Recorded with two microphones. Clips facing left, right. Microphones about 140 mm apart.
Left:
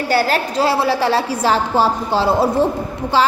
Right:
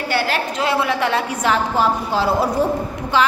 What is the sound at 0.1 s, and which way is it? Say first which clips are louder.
A woman's voice: left 4 dB; 40° left (ahead or behind).